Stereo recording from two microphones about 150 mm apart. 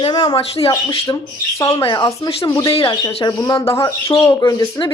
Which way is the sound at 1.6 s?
20° left (ahead or behind).